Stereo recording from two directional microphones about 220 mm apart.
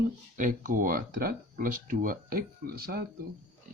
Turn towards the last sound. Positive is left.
turn(degrees=-45)  # may be behind; listen again after turning